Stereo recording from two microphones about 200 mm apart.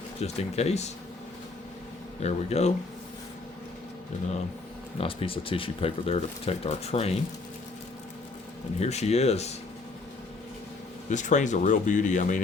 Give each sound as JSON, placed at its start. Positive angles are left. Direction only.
{"t": 0.2, "sound": "speech", "side_deg": 35}
{"t": 2.2, "sound": "speech", "side_deg": 35}
{"t": 4.9, "sound": "speech", "side_deg": 25}
{"t": 8.8, "sound": "speech", "side_deg": 35}
{"t": 11.1, "sound": "speech", "side_deg": 40}